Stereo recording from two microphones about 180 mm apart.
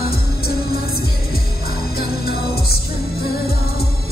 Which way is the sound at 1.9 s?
60° left (ahead or behind).